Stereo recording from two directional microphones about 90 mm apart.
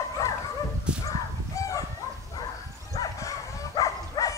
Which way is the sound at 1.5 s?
35° left (ahead or behind).